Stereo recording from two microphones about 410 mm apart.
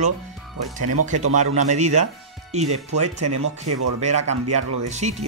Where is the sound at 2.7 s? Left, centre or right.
Right.